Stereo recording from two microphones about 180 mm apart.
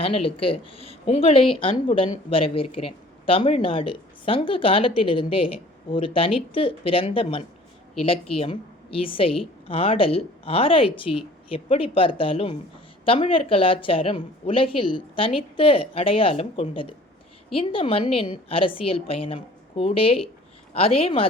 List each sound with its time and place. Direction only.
0.0 s speech: 30° left (ahead or behind)